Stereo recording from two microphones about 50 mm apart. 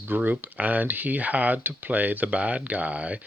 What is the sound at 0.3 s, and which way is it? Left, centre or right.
Speech, right.